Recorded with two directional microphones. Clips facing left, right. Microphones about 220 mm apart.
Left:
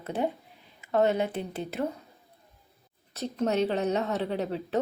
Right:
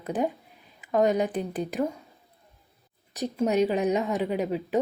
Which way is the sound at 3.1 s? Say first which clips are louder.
Right 3 dB; 15° right (ahead or behind).